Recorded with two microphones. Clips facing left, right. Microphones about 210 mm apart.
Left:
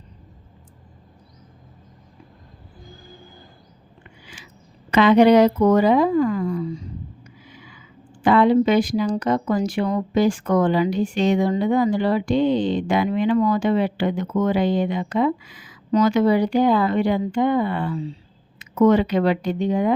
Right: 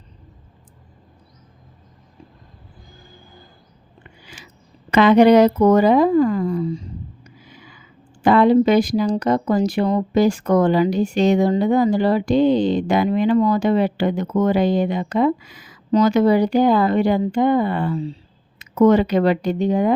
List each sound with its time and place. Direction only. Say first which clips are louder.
4.9 s speech: right 2 dB; 45° right (ahead or behind)
7.3 s a sound: even; 40° right (ahead or behind)
8.2 s speech: right 2 dB; 40° right (ahead or behind)